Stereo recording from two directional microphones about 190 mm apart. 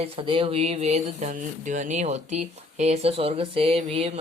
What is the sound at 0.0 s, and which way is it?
Speech, 30° right (ahead or behind).